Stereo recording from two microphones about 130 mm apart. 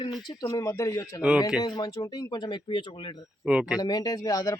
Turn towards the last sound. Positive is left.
turn(degrees=30)  # may be behind; listen again after turning